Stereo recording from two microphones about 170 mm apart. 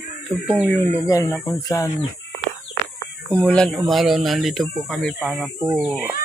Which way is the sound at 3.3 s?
10° left (ahead or behind).